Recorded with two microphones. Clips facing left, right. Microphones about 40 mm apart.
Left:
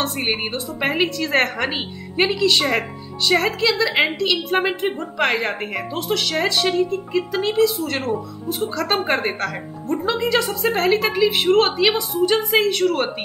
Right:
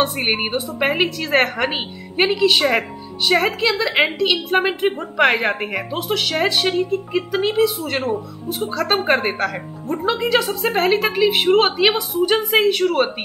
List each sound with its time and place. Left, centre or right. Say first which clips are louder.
0.0 s a woman's voice: right 3 dB; centre
7.1 s a woman's voice: right 1 dB; centre